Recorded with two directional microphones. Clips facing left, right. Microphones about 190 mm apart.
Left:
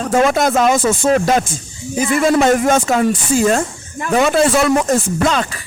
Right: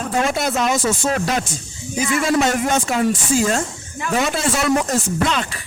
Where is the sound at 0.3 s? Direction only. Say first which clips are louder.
Left 6 dB; 50° left (ahead or behind).